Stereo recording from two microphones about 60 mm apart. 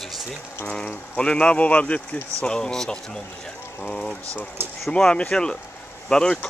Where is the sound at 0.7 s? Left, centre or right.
Centre.